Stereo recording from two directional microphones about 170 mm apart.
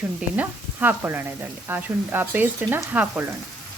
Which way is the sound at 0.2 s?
10° right (ahead or behind).